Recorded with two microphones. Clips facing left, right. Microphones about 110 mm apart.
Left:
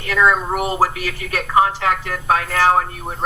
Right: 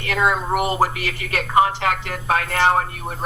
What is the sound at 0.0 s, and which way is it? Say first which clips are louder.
Speech: left 3 dB; 60° right (ahead or behind).